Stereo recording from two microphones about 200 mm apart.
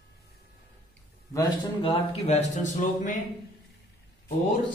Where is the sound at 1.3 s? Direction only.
25° left (ahead or behind).